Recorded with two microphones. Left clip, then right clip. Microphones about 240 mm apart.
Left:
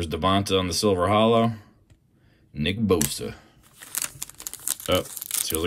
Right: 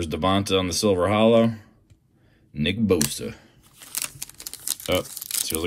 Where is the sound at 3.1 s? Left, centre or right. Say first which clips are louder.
Even; centre.